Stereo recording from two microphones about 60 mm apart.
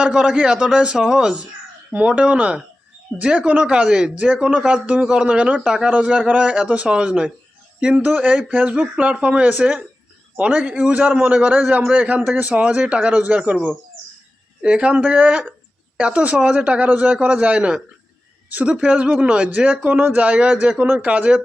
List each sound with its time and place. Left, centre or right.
0.0 s a man's voice: centre
8.0 s a man's voice: right
14.6 s a man's voice: centre